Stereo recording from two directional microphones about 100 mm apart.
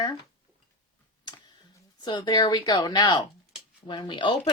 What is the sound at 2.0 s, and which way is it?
Speech, 45° left (ahead or behind).